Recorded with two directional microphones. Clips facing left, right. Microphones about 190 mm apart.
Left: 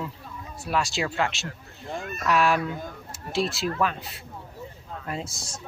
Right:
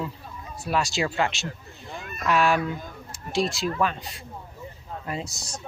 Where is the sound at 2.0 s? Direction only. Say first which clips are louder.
Left 3 dB; 45° left (ahead or behind).